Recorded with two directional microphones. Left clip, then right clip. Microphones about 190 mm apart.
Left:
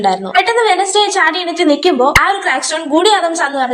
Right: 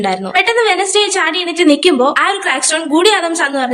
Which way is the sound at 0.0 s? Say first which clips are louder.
Left 1 dB; 10° right (ahead or behind).